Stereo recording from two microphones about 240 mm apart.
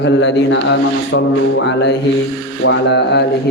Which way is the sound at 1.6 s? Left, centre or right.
Left.